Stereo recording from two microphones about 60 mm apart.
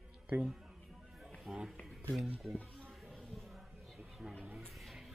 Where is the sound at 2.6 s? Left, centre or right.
Centre.